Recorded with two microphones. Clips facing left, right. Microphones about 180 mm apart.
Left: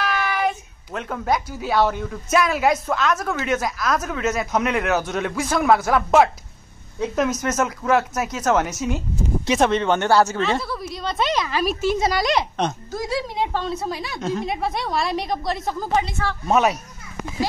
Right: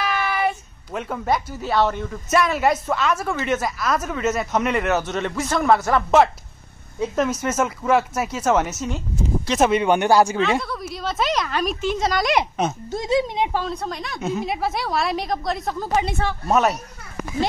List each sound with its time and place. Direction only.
0.0 s a sound: 5° right (ahead or behind)
2.3 s a woman's voice: centre (ahead or behind)
10.3 s a woman's voice: centre (ahead or behind)
12.4 s speech: 5° right (ahead or behind)
12.9 s speech: 20° right (ahead or behind)
13.5 s speech: 5° right (ahead or behind)
13.7 s a woman's voice: 5° left (ahead or behind)